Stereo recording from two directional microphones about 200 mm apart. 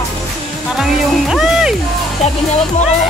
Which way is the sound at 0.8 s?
5° right (ahead or behind).